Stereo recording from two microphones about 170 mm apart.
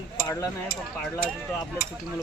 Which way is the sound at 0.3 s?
15° left (ahead or behind).